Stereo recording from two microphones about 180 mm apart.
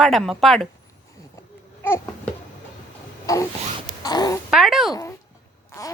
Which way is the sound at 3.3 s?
20° left (ahead or behind).